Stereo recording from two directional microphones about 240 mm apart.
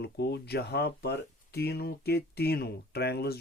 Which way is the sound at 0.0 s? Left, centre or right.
Left.